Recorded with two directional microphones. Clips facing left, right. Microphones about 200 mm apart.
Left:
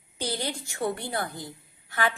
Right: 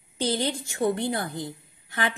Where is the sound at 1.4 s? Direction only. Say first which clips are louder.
Right 5 dB; 20° right (ahead or behind).